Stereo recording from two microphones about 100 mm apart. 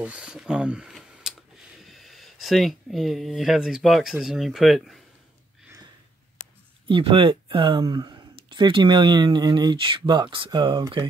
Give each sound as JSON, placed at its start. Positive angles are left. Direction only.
{"t": 0.0, "sound": "a sound", "side_deg": -10}
{"t": 1.8, "sound": "speech", "side_deg": 0}
{"t": 6.9, "sound": "speech", "side_deg": -60}
{"t": 7.8, "sound": "speech", "side_deg": -45}